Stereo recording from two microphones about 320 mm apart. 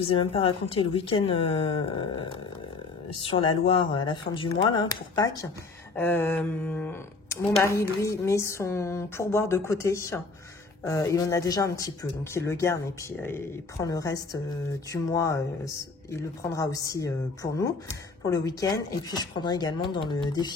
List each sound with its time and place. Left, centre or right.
0.1 s speech: centre